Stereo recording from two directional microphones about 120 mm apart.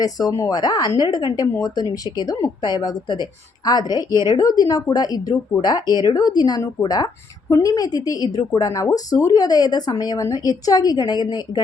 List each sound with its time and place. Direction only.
0.0 s a woman's voice: 30° left (ahead or behind)